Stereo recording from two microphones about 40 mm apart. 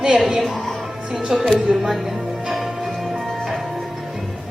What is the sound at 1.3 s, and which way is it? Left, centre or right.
Speech, centre.